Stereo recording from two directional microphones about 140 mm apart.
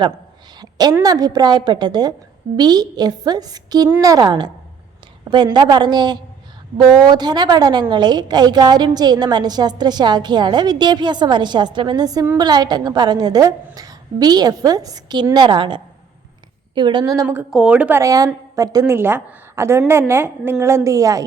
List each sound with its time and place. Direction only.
0.6 s a sound: 30° right (ahead or behind)
1.0 s a woman's voice: 25° right (ahead or behind)
3.8 s a woman's voice: 15° right (ahead or behind)
4.1 s a woman's voice: 30° right (ahead or behind)
17.5 s a woman's voice: 5° right (ahead or behind)
18.0 s a woman's voice: 25° right (ahead or behind)